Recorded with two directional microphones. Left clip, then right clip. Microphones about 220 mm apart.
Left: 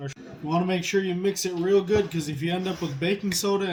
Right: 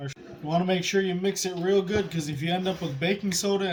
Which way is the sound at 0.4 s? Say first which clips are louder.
Even; 25° right (ahead or behind).